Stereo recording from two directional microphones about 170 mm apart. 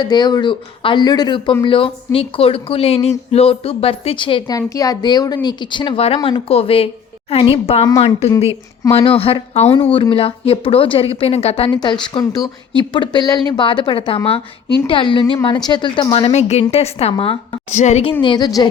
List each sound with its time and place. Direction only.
0.0 s speech: 25° left (ahead or behind)
11.7 s speech: 25° left (ahead or behind); by 18.1 s 40° left (ahead or behind)
18.2 s speech: 25° left (ahead or behind)